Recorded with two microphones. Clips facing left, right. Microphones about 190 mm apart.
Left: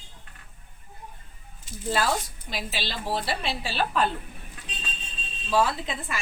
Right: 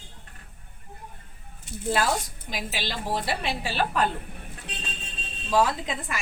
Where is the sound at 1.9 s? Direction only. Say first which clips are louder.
Right 1 dB; 15° right (ahead or behind).